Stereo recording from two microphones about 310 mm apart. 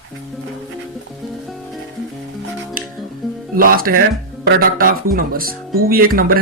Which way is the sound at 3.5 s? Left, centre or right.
Right.